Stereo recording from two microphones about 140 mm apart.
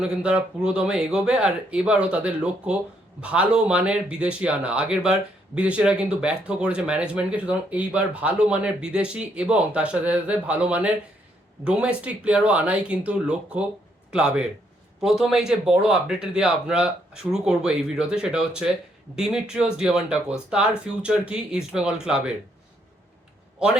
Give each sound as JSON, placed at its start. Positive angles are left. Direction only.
{"t": 0.0, "sound": "speech", "side_deg": -5}